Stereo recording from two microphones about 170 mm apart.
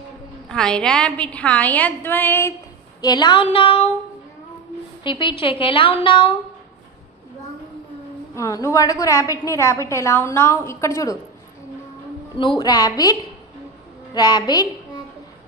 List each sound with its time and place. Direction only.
0.5 s a woman's voice: 5° left (ahead or behind)
3.0 s a woman's voice: 25° left (ahead or behind)
5.0 s a woman's voice: 30° left (ahead or behind)
8.4 s a woman's voice: 20° left (ahead or behind)
12.4 s a woman's voice: 25° left (ahead or behind)